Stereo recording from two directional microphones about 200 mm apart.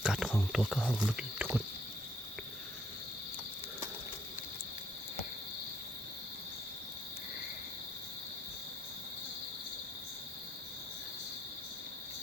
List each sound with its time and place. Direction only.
0.0 s speech: 5° right (ahead or behind)